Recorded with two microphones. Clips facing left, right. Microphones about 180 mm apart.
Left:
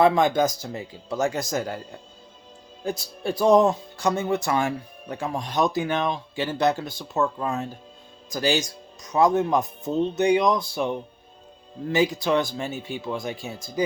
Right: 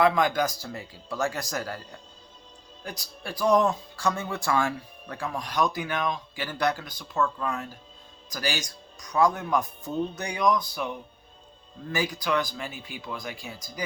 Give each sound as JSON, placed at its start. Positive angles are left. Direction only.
{"t": 0.0, "sound": "speech", "side_deg": 25}